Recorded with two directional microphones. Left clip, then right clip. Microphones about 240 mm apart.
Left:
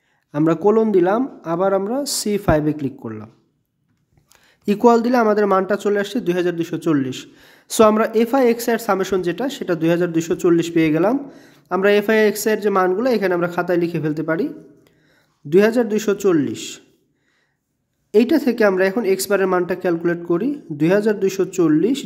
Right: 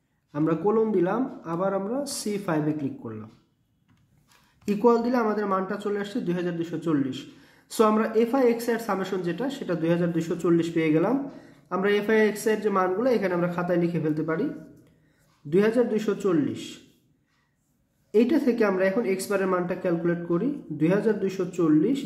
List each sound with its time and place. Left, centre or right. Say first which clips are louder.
0.3 s speech: left 8 dB; left
4.6 s speech: left 7 dB; left
15.5 s speech: left 7 dB; left
18.1 s speech: left 6 dB; left